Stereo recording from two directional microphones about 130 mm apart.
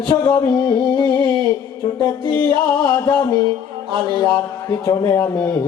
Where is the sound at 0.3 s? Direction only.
30° left (ahead or behind).